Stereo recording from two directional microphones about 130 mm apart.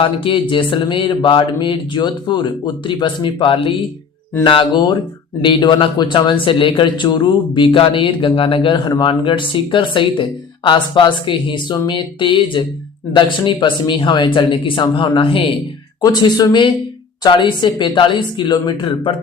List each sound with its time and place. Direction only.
0.0 s speech: 40° left (ahead or behind)
16.0 s speech: 30° left (ahead or behind)